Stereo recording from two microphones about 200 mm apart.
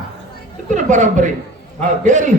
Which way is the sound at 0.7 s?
40° right (ahead or behind).